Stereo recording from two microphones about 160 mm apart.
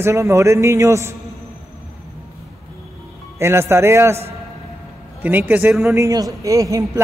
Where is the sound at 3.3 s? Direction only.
15° right (ahead or behind).